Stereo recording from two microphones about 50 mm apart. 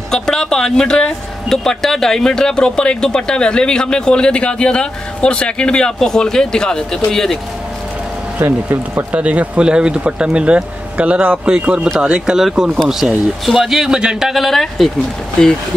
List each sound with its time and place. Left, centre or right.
0.1 s speech: centre
8.4 s speech: right
9.1 s speech: right
12.4 s a man's voice: centre
14.3 s speech: centre
15.4 s speech: centre